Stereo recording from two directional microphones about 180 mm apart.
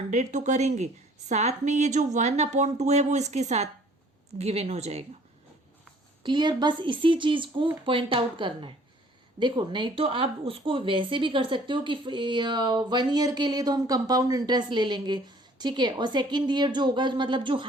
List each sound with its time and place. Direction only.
0.1 s a woman's voice: 40° right (ahead or behind)
6.2 s a woman's voice: 25° right (ahead or behind)